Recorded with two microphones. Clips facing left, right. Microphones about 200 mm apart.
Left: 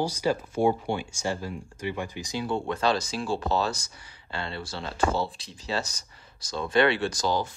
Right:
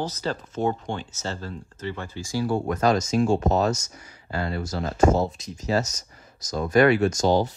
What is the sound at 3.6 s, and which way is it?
Speech, 30° left (ahead or behind).